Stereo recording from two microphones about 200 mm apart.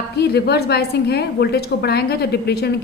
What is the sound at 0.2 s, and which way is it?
A woman's voice, 55° left (ahead or behind).